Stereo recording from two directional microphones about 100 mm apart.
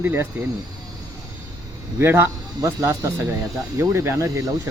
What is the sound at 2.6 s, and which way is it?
Speech, 35° right (ahead or behind).